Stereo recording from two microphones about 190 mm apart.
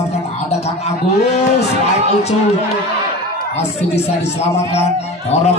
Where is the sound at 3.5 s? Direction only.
35° left (ahead or behind).